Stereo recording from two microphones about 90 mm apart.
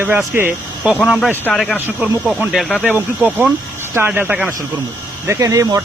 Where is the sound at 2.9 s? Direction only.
15° right (ahead or behind).